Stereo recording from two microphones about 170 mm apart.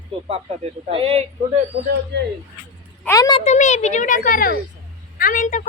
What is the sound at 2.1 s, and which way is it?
Speech, 90° right.